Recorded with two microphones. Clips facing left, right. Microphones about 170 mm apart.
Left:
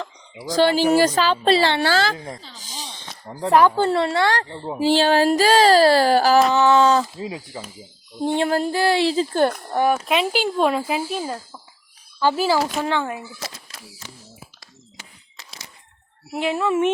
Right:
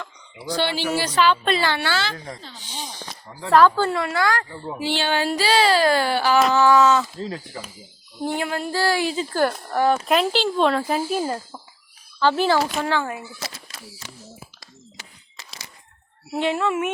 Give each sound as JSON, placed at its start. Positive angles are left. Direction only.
{"t": 0.5, "sound": "speech", "side_deg": 40}
{"t": 3.5, "sound": "speech", "side_deg": 20}
{"t": 3.9, "sound": "speech", "side_deg": 30}
{"t": 6.5, "sound": "speech", "side_deg": 20}
{"t": 7.2, "sound": "speech", "side_deg": 10}
{"t": 8.2, "sound": "speech", "side_deg": 25}
{"t": 8.4, "sound": "speech", "side_deg": 35}
{"t": 8.7, "sound": "speech", "side_deg": 20}
{"t": 9.6, "sound": "speech", "side_deg": 20}
{"t": 16.5, "sound": "speech", "side_deg": 15}